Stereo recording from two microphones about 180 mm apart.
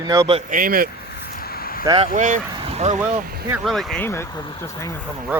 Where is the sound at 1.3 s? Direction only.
55° left (ahead or behind).